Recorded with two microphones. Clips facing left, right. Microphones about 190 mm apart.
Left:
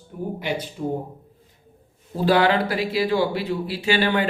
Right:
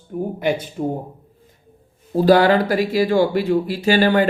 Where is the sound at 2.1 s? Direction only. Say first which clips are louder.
Right 5 dB; 40° right (ahead or behind).